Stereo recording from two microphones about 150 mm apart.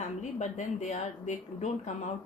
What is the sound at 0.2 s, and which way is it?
A woman's voice, 50° left (ahead or behind).